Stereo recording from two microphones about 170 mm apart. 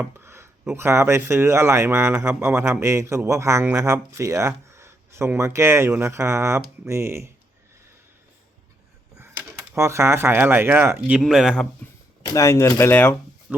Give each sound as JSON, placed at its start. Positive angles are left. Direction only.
{"t": 0.0, "sound": "speech", "side_deg": -15}
{"t": 9.1, "sound": "speech", "side_deg": -15}
{"t": 12.2, "sound": "speech", "side_deg": 20}
{"t": 13.5, "sound": "speech", "side_deg": -5}